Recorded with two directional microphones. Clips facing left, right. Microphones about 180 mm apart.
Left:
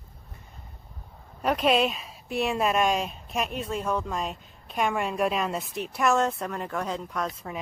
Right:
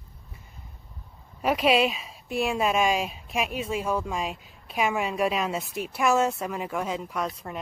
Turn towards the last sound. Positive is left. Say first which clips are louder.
# right 1 dB
turn(degrees=0)  # may be behind; listen again after turning